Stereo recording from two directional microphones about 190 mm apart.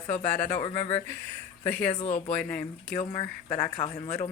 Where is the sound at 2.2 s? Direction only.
5° left (ahead or behind).